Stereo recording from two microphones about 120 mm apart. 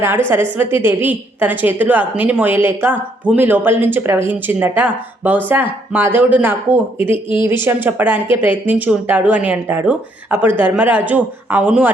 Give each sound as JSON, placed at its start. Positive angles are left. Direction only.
{"t": 0.3, "sound": "a woman's voice", "side_deg": -20}